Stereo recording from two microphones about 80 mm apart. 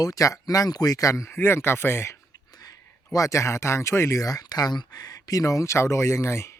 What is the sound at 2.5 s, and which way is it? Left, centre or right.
Speech, left.